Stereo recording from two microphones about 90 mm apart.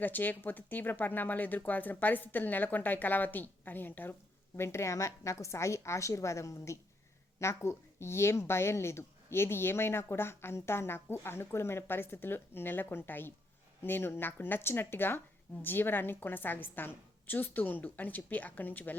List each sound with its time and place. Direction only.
0.0 s a woman's voice: 20° left (ahead or behind)